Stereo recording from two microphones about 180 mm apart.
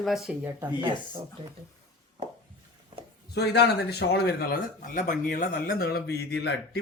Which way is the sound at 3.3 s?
65° left (ahead or behind).